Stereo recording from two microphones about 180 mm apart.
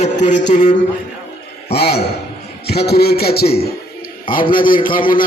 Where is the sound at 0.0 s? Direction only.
40° left (ahead or behind).